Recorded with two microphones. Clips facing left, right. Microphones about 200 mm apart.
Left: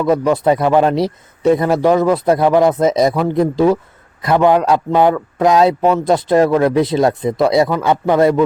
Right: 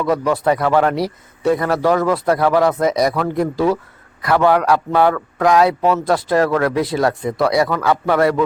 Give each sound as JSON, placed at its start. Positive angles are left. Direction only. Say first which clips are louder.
{"t": 0.0, "sound": "a man's voice", "louder": "left 3 dB", "side_deg": 20}